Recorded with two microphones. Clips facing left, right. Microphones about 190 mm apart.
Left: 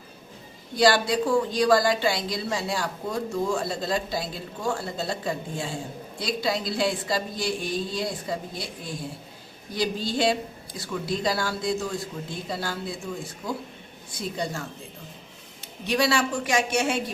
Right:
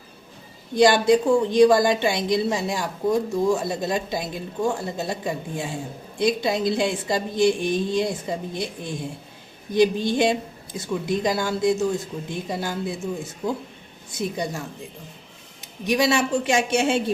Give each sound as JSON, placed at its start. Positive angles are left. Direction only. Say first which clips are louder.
{"t": 0.8, "sound": "a woman's voice", "louder": "right 5 dB", "side_deg": -20}
{"t": 14.2, "sound": "a woman's voice", "louder": "right 3 dB", "side_deg": -20}
{"t": 15.9, "sound": "a woman's voice", "louder": "right 3 dB", "side_deg": -20}